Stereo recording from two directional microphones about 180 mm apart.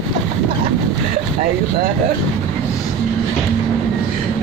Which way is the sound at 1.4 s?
50° right (ahead or behind).